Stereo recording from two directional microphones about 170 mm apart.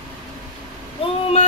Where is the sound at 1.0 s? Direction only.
30° left (ahead or behind).